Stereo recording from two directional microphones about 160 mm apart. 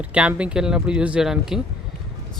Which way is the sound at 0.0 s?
10° right (ahead or behind).